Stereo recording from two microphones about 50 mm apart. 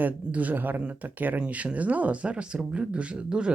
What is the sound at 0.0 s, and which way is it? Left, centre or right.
Speech, right.